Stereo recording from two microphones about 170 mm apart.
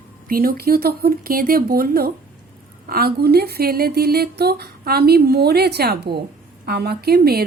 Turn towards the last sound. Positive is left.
turn(degrees=-65)  # may be behind; listen again after turning